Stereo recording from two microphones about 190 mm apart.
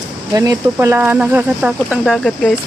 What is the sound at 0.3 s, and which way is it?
Speech, 15° right (ahead or behind).